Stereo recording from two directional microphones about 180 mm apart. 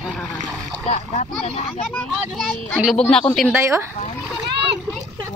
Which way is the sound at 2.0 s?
10° left (ahead or behind).